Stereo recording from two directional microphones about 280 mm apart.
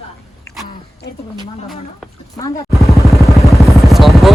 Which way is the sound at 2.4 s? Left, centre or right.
Centre.